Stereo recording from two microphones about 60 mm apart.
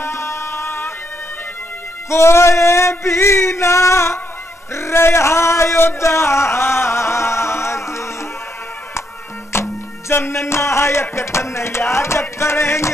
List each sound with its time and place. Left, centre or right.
0.0 s music: left
2.0 s a sound: left
9.5 s music: left